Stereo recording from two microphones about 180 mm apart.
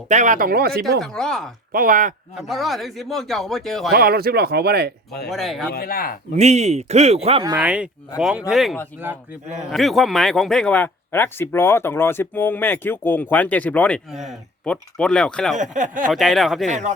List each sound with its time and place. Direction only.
0.1 s speech: 45° right (ahead or behind); by 1.0 s 60° right (ahead or behind)
1.0 s speech: 5° left (ahead or behind)
1.7 s speech: 50° right (ahead or behind)
2.5 s speech: centre (ahead or behind)
3.9 s speech: 55° right (ahead or behind)
5.3 s speech: centre (ahead or behind)
5.7 s speech: 55° left (ahead or behind)
6.3 s speech: 40° right (ahead or behind)
7.6 s speech: 5° right (ahead or behind)
15.5 s speech: 45° right (ahead or behind)
16.1 s speech: centre (ahead or behind)
16.6 s speech: 40° right (ahead or behind)